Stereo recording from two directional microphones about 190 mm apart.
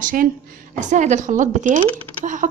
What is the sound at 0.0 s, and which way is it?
A woman's voice, 45° right (ahead or behind).